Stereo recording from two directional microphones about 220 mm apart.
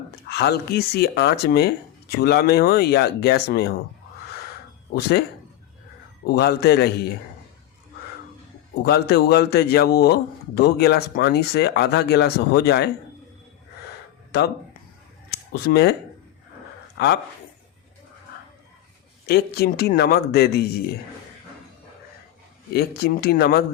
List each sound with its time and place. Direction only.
0.3 s speech: 45° left (ahead or behind)
4.9 s speech: 45° left (ahead or behind)
6.2 s speech: 45° left (ahead or behind)
8.7 s speech: 45° left (ahead or behind)
14.3 s speech: 50° left (ahead or behind)
17.0 s speech: 50° left (ahead or behind)
19.3 s speech: 45° left (ahead or behind)
22.7 s speech: 45° left (ahead or behind)